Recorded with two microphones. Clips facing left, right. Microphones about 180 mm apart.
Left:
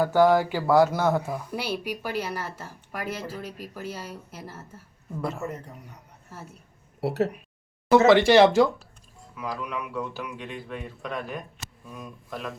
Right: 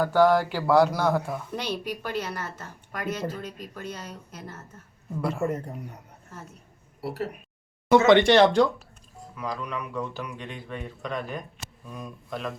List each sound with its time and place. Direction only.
0.0 s speech: 10° left (ahead or behind)
7.0 s speech: 75° left (ahead or behind)
7.9 s speech: 5° left (ahead or behind)